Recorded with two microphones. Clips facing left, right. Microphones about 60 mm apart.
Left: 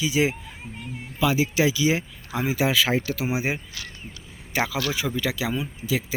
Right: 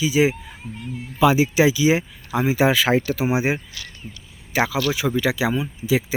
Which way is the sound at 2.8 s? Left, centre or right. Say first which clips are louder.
Right 4 dB; right.